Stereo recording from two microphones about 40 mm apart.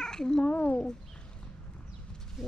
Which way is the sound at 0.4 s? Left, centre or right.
Left.